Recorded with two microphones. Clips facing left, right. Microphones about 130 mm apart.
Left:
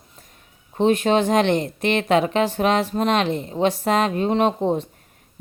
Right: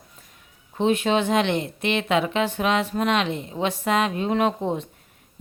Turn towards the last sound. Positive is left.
turn(degrees=35)  # may be behind; listen again after turning